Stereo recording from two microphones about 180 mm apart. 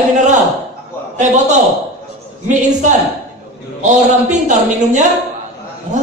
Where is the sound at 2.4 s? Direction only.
45° right (ahead or behind).